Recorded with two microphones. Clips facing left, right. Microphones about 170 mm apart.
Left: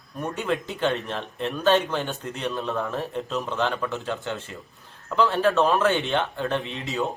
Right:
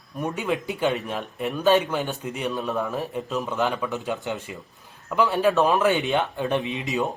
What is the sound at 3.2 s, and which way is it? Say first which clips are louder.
Speech: right 2 dB; 5° right (ahead or behind).